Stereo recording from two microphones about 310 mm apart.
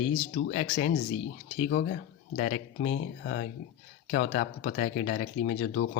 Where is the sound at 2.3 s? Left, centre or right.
Left.